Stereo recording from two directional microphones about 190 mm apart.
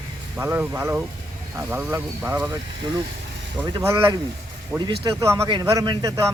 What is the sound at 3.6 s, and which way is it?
Speech, 15° right (ahead or behind).